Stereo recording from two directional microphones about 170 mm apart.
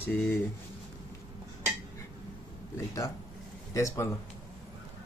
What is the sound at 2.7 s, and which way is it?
Speech, 20° left (ahead or behind).